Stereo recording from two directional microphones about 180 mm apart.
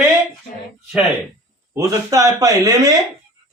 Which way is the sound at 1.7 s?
20° right (ahead or behind).